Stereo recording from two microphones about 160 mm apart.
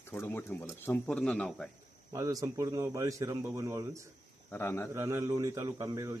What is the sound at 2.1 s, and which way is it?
Speech, 20° right (ahead or behind).